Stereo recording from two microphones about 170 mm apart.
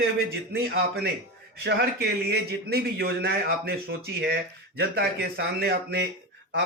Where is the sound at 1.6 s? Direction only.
70° right (ahead or behind).